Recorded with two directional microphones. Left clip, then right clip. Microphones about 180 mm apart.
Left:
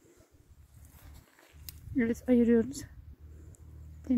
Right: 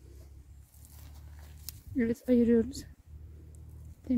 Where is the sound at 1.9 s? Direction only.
10° left (ahead or behind).